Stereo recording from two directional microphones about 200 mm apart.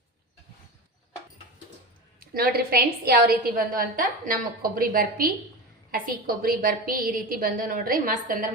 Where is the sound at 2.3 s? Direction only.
50° right (ahead or behind).